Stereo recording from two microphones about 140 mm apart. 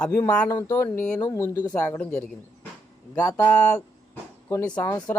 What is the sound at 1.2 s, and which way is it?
Speech, 25° left (ahead or behind).